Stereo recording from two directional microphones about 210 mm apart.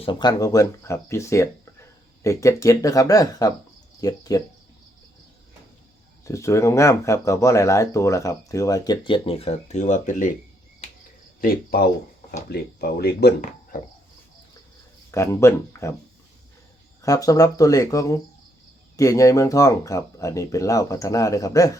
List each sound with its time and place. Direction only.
0.0 s speech: 20° left (ahead or behind)
6.2 s speech: 15° left (ahead or behind); by 10.3 s 35° left (ahead or behind)
11.3 s speech: 45° left (ahead or behind)
15.1 s speech: 15° left (ahead or behind)
17.0 s speech: 15° left (ahead or behind)